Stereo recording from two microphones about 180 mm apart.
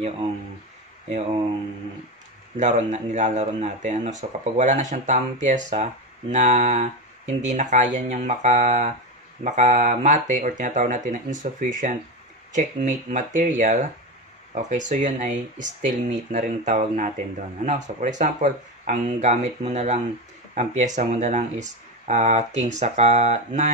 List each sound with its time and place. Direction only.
2.5 s speech: 40° right (ahead or behind)